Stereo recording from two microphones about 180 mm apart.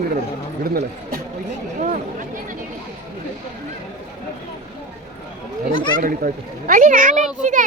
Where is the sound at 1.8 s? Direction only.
45° right (ahead or behind).